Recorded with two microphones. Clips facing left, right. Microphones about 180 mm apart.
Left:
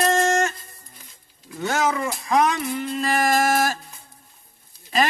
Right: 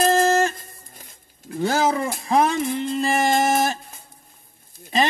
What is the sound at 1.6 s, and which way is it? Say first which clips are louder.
Speech: right 2 dB; 30° right (ahead or behind).